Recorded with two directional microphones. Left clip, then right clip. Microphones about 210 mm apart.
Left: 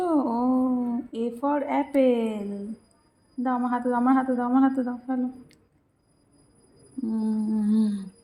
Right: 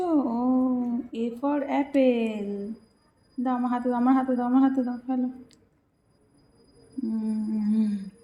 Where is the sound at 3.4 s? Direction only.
20° left (ahead or behind).